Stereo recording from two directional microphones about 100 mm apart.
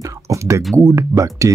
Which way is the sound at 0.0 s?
35° right (ahead or behind).